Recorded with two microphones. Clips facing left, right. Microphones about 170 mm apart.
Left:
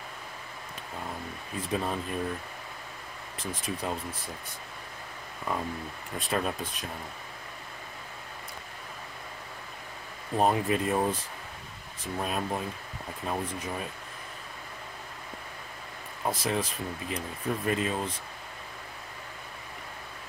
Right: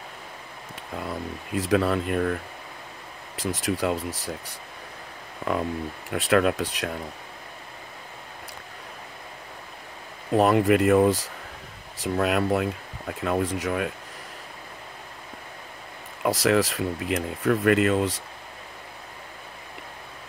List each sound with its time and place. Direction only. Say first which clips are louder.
0.9 s speech: right 7 dB; 85° right
3.3 s speech: right 8 dB; 80° right
10.3 s speech: right 7 dB; 90° right; by 13.9 s 75° right (ahead or behind)
16.2 s speech: right 8 dB; 85° right